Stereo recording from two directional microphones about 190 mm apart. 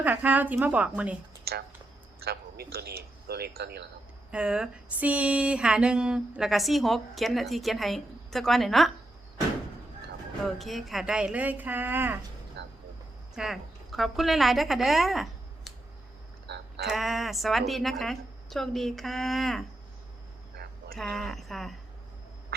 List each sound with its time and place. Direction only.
0.0 s speech: 10° right (ahead or behind)
1.5 s a man's voice: 55° right (ahead or behind)
4.3 s a sound: 5° right (ahead or behind)
10.4 s speech: centre (ahead or behind)
12.6 s vehicle: 65° right (ahead or behind)
13.3 s a woman's voice: centre (ahead or behind)
16.5 s music: 60° right (ahead or behind)
16.8 s a sound: centre (ahead or behind)
20.9 s a sound: 5° left (ahead or behind)